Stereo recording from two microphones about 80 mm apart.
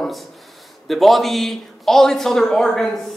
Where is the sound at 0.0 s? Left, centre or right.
Centre.